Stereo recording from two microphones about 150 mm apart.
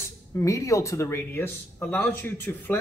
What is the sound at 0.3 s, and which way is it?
Speech, 20° left (ahead or behind).